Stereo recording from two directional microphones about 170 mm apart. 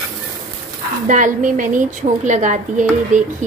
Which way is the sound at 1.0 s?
50° right (ahead or behind).